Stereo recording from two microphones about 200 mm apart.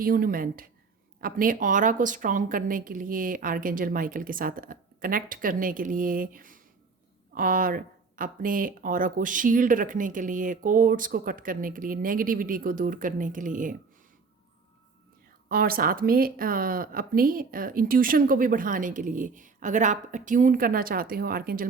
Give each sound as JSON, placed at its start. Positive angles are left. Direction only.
{"t": 0.0, "sound": "speech", "side_deg": -45}
{"t": 15.4, "sound": "speech", "side_deg": -45}